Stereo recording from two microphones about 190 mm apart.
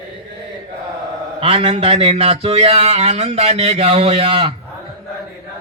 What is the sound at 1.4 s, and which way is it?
Speech, 30° right (ahead or behind).